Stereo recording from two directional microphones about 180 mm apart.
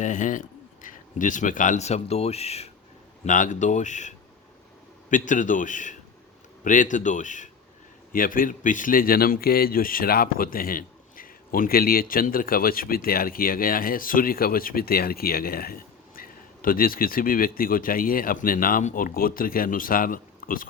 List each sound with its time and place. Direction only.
0.0 s a man's voice: 45° left (ahead or behind)
5.1 s a man's voice: 45° left (ahead or behind)